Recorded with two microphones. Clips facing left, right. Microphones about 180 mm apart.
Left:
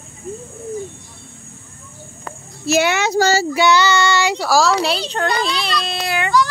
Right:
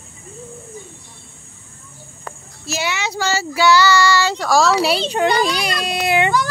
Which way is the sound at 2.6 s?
55° left (ahead or behind).